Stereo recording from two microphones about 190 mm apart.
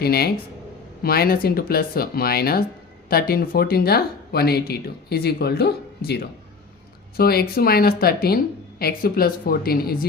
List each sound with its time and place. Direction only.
0.0 s speech: 55° left (ahead or behind)